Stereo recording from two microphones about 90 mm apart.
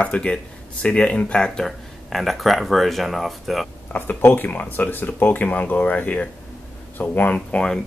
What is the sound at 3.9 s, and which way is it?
Speech, 25° left (ahead or behind).